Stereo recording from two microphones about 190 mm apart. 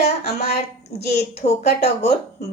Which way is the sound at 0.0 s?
35° left (ahead or behind).